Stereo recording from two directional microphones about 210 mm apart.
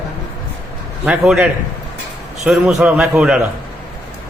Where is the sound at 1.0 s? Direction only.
5° right (ahead or behind).